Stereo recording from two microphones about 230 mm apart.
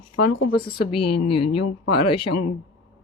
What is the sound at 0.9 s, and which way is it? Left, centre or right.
Speech, left.